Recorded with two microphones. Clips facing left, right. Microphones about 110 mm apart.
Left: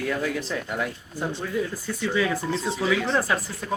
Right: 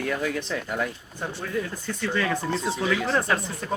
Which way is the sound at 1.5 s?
5° left (ahead or behind).